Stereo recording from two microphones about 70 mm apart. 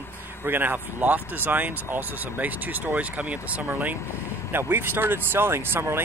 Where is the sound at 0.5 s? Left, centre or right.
Right.